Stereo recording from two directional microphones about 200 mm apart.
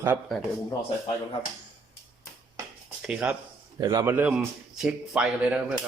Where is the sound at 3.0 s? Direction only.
5° right (ahead or behind).